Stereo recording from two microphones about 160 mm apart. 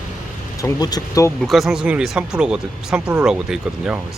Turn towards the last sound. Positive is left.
turn(degrees=-5)  # may be behind; listen again after turning